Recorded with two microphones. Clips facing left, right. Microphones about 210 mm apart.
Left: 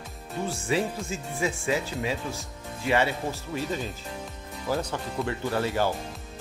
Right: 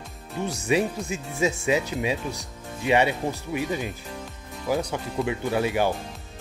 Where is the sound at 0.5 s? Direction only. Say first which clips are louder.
Right 4 dB; 20° right (ahead or behind).